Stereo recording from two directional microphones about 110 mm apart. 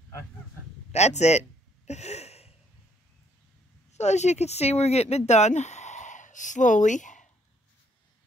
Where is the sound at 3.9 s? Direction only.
90° left.